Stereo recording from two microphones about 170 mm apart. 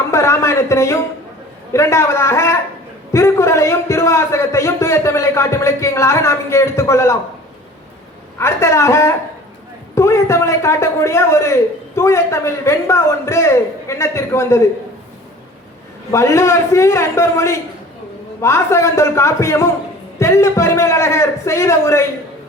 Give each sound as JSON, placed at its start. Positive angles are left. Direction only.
{"t": 0.1, "sound": "a sound", "side_deg": 15}
{"t": 1.7, "sound": "a man's voice", "side_deg": 15}
{"t": 8.4, "sound": "a man's voice", "side_deg": 15}
{"t": 16.1, "sound": "a man's voice", "side_deg": 15}